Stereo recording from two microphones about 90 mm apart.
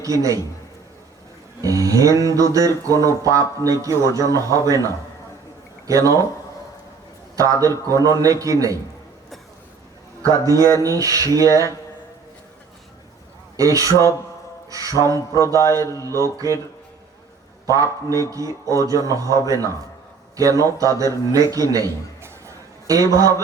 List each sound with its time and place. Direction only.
0.0 s speech: 40° right (ahead or behind)
1.6 s speech: 40° right (ahead or behind)
5.9 s speech: 40° right (ahead or behind)
7.3 s speech: 40° right (ahead or behind)
10.4 s speech: 40° right (ahead or behind)
13.6 s speech: 40° right (ahead or behind)
17.7 s a man's voice: 40° right (ahead or behind)